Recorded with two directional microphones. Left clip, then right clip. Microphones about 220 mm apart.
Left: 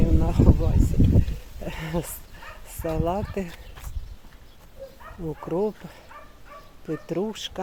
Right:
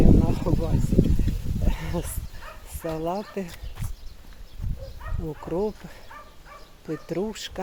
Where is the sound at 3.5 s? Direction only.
5° left (ahead or behind).